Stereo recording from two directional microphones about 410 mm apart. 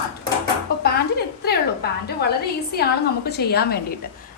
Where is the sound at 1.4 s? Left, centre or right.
Left.